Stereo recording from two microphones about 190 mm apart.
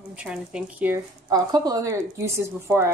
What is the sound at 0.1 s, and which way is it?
A woman's voice, 5° right (ahead or behind).